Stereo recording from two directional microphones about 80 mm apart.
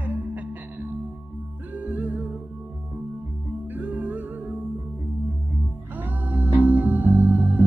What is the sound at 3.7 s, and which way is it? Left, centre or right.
Music, right.